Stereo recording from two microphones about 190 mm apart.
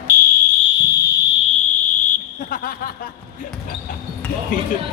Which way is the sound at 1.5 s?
40° left (ahead or behind).